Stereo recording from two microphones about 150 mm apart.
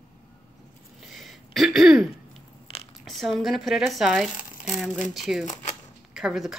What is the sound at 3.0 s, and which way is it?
A woman's voice, centre (ahead or behind).